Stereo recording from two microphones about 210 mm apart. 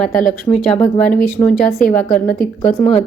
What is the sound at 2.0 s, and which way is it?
Speech, 40° left (ahead or behind).